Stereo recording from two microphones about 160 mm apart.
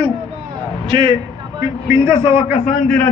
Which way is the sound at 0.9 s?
30° right (ahead or behind).